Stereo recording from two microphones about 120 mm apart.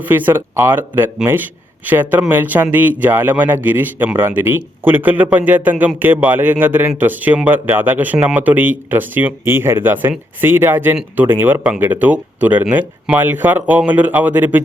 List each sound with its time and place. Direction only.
0.1 s a man's voice: 15° right (ahead or behind)